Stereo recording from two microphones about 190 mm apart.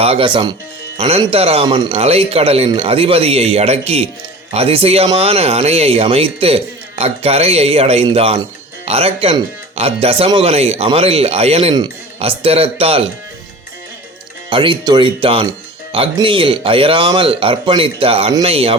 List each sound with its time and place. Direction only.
0.0 s speech: 30° right (ahead or behind)
14.5 s speech: 25° right (ahead or behind)